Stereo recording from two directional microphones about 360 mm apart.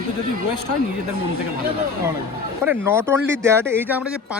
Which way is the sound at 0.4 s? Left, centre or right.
Left.